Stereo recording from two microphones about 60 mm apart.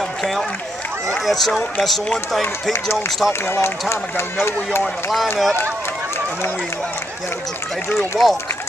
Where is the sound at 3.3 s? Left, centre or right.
Left.